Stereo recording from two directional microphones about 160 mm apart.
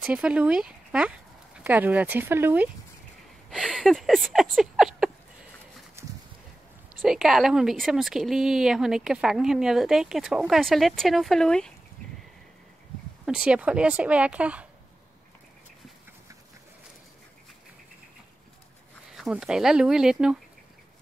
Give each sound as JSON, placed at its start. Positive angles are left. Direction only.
{"t": 0.0, "sound": "speech", "side_deg": -5}
{"t": 3.4, "sound": "speech", "side_deg": 0}
{"t": 6.0, "sound": "a sound", "side_deg": -15}
{"t": 6.9, "sound": "a woman's voice", "side_deg": -5}
{"t": 13.2, "sound": "speech", "side_deg": -5}
{"t": 19.1, "sound": "speech", "side_deg": -5}